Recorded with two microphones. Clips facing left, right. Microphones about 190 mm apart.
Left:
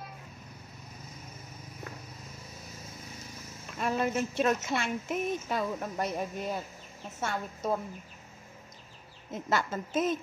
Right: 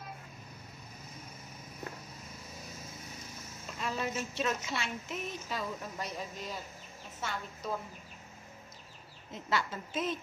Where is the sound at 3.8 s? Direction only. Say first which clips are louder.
Left 6 dB; 55° left (ahead or behind).